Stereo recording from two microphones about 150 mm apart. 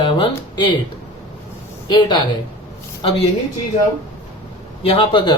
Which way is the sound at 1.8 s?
30° left (ahead or behind).